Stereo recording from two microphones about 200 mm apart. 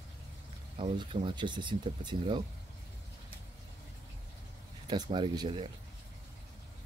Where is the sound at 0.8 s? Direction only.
25° right (ahead or behind).